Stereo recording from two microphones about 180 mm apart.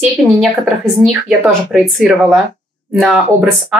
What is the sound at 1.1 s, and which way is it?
A woman's voice, centre (ahead or behind).